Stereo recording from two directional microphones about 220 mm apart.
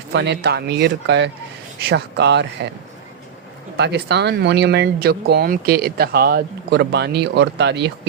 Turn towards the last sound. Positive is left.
turn(degrees=-50)  # may be behind; listen again after turning